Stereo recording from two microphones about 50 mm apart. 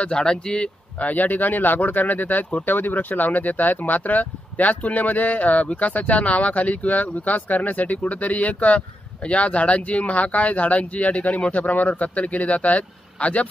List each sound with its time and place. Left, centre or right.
0.0 s speech: centre
0.9 s speech: left